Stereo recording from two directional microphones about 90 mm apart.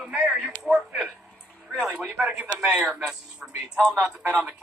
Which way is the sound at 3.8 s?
10° right (ahead or behind).